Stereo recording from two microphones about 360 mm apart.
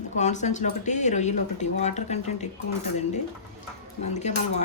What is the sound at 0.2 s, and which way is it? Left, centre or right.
Speech, centre.